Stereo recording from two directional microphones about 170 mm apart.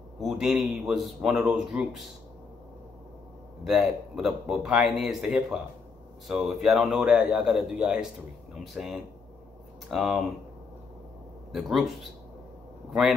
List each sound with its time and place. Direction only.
0.2 s a man's voice: centre (ahead or behind)
3.6 s a man's voice: centre (ahead or behind)
11.5 s a man's voice: centre (ahead or behind)